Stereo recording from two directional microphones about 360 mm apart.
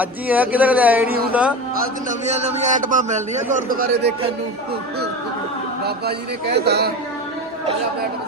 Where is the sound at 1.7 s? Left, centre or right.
Centre.